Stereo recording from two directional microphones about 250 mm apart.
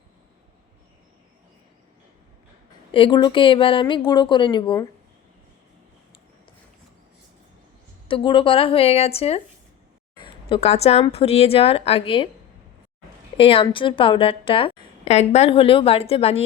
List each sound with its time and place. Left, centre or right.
2.9 s a woman's voice: centre
8.0 s a woman's voice: centre
13.3 s a woman's voice: left